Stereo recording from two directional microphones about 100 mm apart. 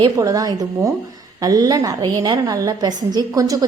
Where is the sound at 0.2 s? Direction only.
35° right (ahead or behind).